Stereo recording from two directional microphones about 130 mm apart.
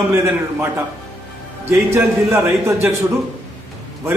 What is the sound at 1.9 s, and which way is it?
A man's voice, 20° right (ahead or behind).